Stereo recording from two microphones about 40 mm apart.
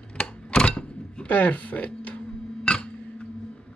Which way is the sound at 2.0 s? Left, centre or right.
Left.